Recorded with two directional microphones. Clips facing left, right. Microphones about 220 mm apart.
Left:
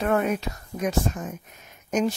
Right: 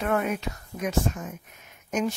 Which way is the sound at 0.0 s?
35° left (ahead or behind).